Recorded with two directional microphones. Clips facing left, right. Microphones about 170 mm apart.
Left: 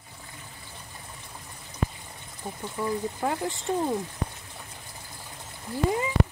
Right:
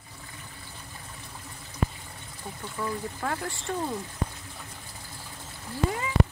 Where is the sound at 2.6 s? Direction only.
20° left (ahead or behind).